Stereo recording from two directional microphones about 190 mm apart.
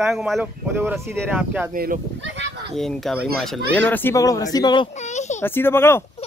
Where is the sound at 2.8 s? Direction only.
Centre (ahead or behind); by 4.9 s 25° left (ahead or behind).